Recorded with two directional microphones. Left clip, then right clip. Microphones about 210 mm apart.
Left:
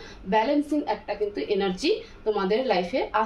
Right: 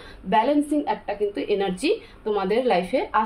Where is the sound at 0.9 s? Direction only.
45° right (ahead or behind).